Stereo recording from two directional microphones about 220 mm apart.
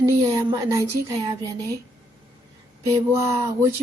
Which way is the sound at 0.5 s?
15° right (ahead or behind).